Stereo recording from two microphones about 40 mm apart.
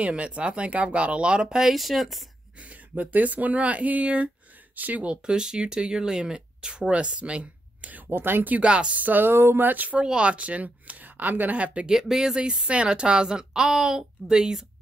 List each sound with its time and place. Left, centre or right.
0.0 s speech: right
1.6 s speech: centre
2.6 s speech: right
4.7 s a sound: right
5.0 s speech: right
8.1 s speech: right
8.5 s speech: right
9.0 s a sound: right
9.3 s speech: right
9.7 s a sound: right
10.0 s speech: right
11.9 s speech: centre
12.6 s speech: right